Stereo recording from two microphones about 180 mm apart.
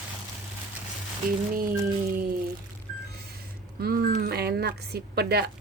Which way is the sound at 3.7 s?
60° right (ahead or behind).